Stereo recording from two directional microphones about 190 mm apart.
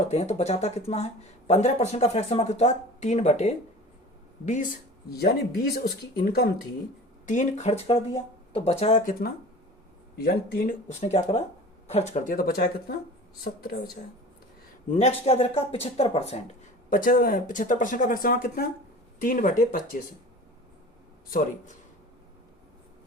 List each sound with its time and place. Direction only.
0.1 s speech: 35° left (ahead or behind)
5.1 s speech: 55° left (ahead or behind)
7.3 s speech: 40° left (ahead or behind)
10.2 s speech: 55° left (ahead or behind)
14.8 s speech: 35° left (ahead or behind)
16.9 s speech: 45° left (ahead or behind)